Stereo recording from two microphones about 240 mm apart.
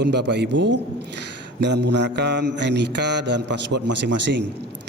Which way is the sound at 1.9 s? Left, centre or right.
Right.